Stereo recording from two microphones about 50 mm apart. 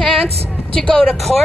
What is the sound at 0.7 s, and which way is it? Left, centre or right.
Speech, centre.